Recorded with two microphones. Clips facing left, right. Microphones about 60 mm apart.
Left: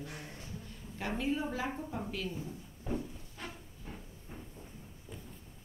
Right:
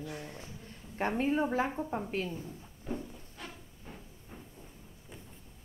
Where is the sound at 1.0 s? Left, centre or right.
Right.